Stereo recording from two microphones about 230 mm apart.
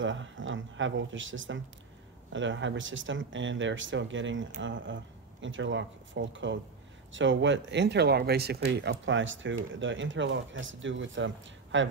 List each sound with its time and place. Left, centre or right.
0.0 s speech: right